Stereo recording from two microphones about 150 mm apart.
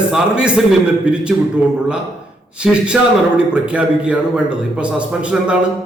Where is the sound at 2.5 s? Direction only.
5° right (ahead or behind).